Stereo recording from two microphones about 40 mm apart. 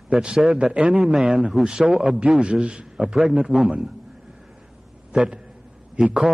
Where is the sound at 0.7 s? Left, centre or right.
Right.